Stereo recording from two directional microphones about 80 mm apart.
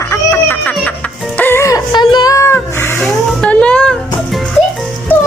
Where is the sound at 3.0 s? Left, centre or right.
Centre.